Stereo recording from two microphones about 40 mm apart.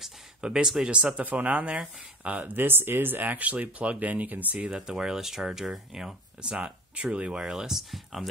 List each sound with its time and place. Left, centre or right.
0.4 s speech: centre
0.8 s speech: right
2.5 s speech: right
4.1 s speech: right
4.6 s speech: right
7.9 s speech: centre